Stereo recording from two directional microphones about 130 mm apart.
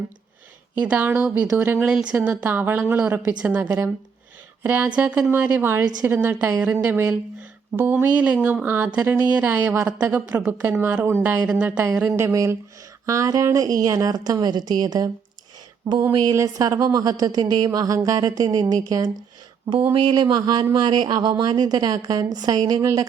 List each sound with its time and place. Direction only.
0.8 s speech: 10° right (ahead or behind); by 15.1 s 30° right (ahead or behind)
16.1 s a woman's voice: 25° right (ahead or behind)